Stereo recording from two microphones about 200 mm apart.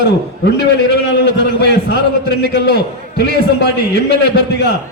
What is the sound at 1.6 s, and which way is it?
A man's voice, 55° left (ahead or behind).